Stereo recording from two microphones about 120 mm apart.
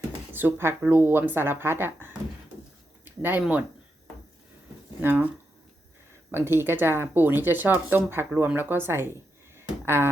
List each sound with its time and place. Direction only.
0.3 s speech: 20° right (ahead or behind)
3.0 s a sound: 15° right (ahead or behind)
4.9 s speech: 15° right (ahead or behind)
6.3 s speech: 20° right (ahead or behind)